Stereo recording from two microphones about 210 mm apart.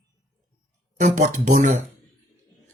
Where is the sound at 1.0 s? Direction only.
35° right (ahead or behind).